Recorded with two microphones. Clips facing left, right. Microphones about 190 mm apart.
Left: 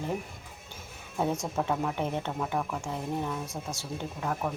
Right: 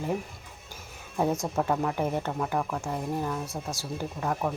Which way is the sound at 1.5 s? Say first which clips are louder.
Right 2 dB; centre (ahead or behind).